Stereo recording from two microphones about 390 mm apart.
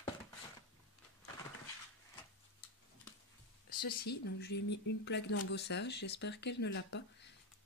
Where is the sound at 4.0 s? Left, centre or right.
Left.